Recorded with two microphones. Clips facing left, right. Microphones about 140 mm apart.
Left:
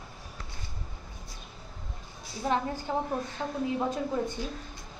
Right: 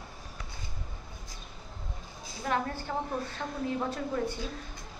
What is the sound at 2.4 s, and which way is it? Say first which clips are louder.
A woman's voice: left 2 dB; 15° left (ahead or behind).